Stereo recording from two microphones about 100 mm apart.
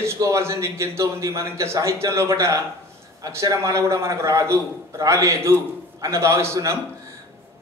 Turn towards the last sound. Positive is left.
turn(degrees=-30)  # may be behind; listen again after turning